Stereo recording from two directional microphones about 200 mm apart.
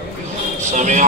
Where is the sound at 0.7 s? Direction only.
35° right (ahead or behind).